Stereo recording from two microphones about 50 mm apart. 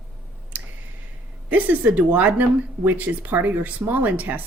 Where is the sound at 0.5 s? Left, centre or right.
Right.